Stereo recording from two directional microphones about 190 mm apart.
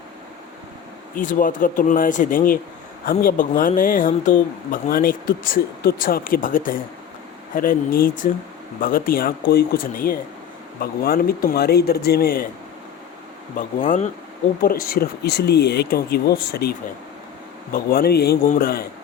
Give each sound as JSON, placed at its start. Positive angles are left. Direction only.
{"t": 1.1, "sound": "speech", "side_deg": 45}
{"t": 13.6, "sound": "speech", "side_deg": 45}